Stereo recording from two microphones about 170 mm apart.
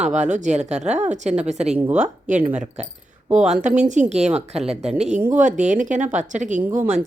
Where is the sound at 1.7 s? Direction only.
5° right (ahead or behind).